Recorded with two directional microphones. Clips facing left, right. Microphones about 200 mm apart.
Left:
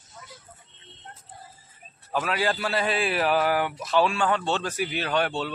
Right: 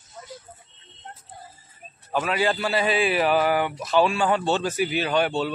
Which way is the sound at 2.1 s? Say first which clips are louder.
Right 3 dB; centre (ahead or behind).